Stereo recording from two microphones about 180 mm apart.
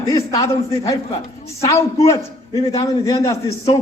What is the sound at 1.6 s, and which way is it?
A man's voice, 15° left (ahead or behind).